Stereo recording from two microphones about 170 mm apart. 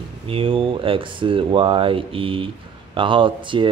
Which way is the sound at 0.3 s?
30° right (ahead or behind).